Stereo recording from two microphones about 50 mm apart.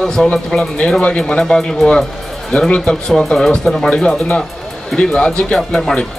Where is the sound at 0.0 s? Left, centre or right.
Centre.